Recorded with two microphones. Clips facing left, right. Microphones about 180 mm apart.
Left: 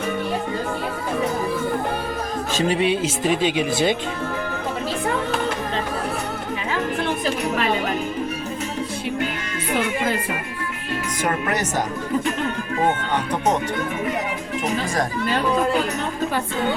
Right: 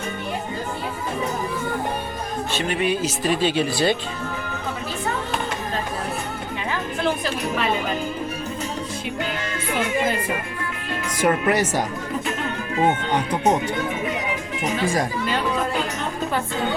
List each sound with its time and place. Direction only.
2.6 s speech: 25° left (ahead or behind)
3.4 s speech: 15° left (ahead or behind)